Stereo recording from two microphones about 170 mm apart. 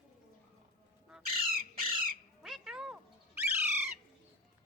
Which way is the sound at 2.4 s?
5° right (ahead or behind).